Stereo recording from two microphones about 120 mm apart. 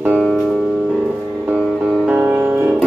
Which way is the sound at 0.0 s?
15° right (ahead or behind).